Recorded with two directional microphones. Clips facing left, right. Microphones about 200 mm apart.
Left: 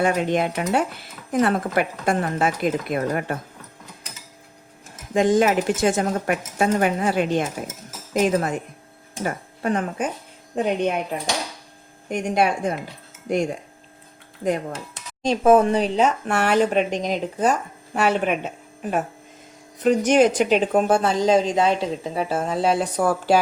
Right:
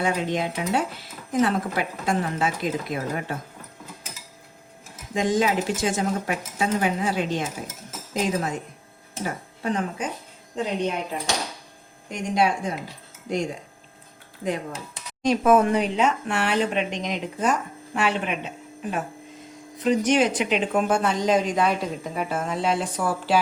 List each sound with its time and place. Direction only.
0.0 s speech: 55° left (ahead or behind)
5.1 s speech: 55° left (ahead or behind)
12.0 s speech: 55° left (ahead or behind)
15.2 s speech: 30° left (ahead or behind); by 23.4 s 45° left (ahead or behind)